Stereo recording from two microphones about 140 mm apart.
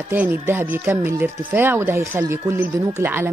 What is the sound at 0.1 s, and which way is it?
Speech, 15° right (ahead or behind).